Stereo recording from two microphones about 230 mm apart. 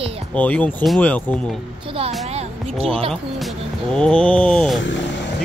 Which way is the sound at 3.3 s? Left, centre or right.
Centre.